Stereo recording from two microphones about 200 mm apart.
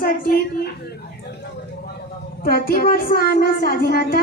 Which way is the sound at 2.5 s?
50° left (ahead or behind).